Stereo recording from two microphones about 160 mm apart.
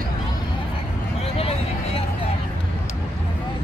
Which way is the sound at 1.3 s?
35° left (ahead or behind).